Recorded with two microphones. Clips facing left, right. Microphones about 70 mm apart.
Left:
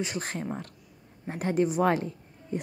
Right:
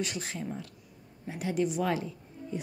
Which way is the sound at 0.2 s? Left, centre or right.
Left.